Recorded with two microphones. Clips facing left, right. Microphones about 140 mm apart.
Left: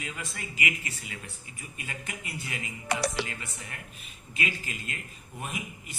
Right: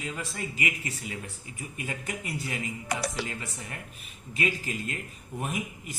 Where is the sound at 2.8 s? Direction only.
80° left.